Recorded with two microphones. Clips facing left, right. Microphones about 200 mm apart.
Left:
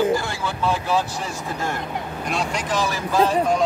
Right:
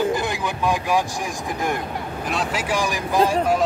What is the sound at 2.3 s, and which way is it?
Speech, 5° right (ahead or behind).